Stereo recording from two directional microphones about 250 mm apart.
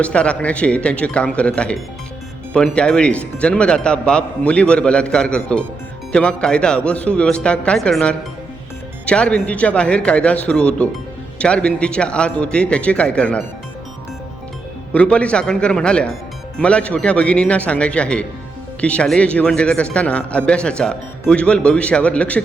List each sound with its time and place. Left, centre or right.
0.0 s speech: centre
14.9 s speech: centre